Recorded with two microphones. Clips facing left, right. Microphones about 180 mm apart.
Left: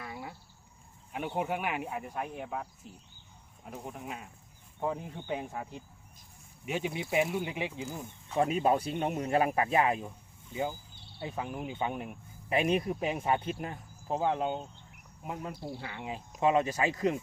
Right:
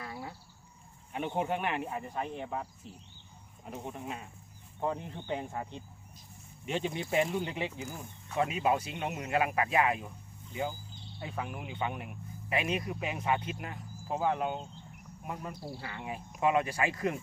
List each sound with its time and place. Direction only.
0.0 s a sound: 5° left (ahead or behind)
1.1 s speech: 5° left (ahead or behind)
3.7 s speech: centre (ahead or behind); by 8.4 s 20° left (ahead or behind)
8.4 s speech: 35° left (ahead or behind)
9.3 s speech: 30° left (ahead or behind)
10.5 s a sound: 15° left (ahead or behind)
11.5 s speech: 35° left (ahead or behind)
14.2 s speech: 20° left (ahead or behind)
15.2 s cricket: 10° left (ahead or behind)
15.6 s speech: 20° left (ahead or behind)